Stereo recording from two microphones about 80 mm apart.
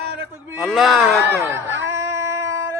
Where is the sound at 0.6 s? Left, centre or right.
Centre.